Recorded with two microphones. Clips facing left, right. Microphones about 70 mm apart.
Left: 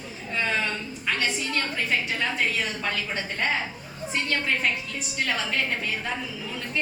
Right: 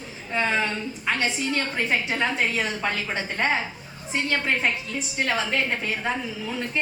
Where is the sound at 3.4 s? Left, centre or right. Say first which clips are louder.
Right 3 dB; right.